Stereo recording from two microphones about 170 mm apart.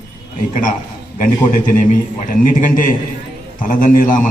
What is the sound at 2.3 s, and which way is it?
A man's voice, 50° left (ahead or behind).